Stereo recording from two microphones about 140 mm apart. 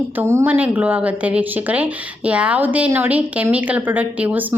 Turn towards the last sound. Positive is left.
turn(degrees=-10)  # may be behind; listen again after turning